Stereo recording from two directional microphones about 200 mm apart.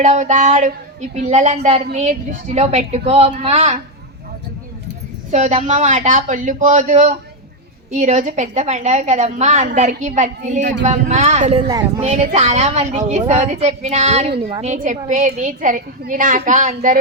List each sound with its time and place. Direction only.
0.0 s a woman's voice: 35° right (ahead or behind)
5.3 s a woman's voice: 35° right (ahead or behind)
11.7 s speech: 20° right (ahead or behind)
12.0 s a woman's voice: 35° right (ahead or behind)